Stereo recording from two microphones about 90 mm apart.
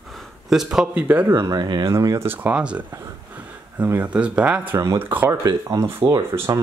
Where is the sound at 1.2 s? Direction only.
30° right (ahead or behind).